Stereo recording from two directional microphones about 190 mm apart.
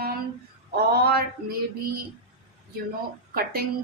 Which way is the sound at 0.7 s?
55° right (ahead or behind).